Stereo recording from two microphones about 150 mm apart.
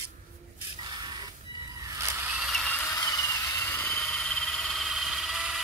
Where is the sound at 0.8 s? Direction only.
30° right (ahead or behind).